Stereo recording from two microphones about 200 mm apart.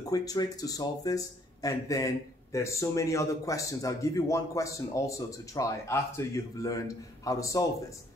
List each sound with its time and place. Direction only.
0.0 s speech: 20° left (ahead or behind)